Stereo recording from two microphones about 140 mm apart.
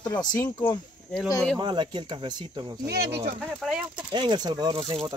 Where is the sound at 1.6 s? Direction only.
35° right (ahead or behind).